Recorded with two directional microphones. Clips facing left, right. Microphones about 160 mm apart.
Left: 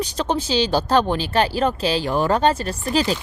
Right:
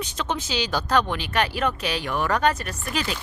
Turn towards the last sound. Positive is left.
turn(degrees=35)  # may be behind; listen again after turning